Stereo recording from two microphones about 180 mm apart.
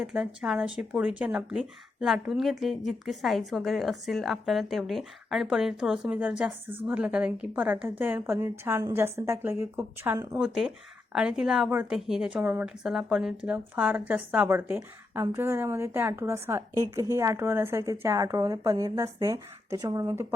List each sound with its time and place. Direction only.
0.0 s a woman's voice: 5° right (ahead or behind)